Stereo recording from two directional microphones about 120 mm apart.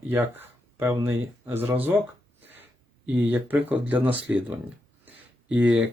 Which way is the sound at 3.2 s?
15° right (ahead or behind).